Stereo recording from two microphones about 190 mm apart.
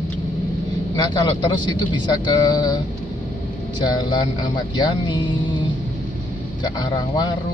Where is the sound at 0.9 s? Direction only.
25° left (ahead or behind).